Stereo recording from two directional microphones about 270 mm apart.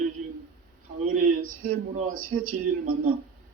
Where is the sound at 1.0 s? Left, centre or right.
Right.